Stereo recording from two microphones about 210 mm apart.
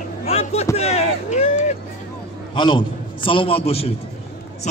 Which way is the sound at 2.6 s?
20° left (ahead or behind).